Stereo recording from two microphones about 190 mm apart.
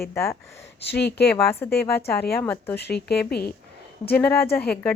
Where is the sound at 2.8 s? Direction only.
60° left (ahead or behind).